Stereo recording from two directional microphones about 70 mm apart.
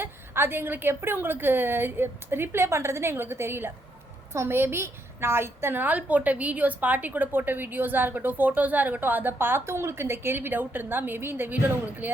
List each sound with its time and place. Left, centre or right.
0.0 s a woman's voice: right